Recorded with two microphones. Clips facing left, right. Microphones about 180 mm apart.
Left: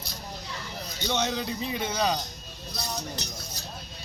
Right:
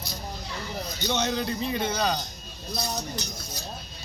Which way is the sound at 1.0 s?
Centre (ahead or behind).